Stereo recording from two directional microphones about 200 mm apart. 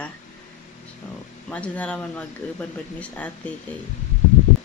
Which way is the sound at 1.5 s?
5° left (ahead or behind).